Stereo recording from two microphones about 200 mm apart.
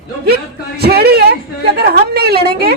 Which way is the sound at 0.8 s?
55° right (ahead or behind).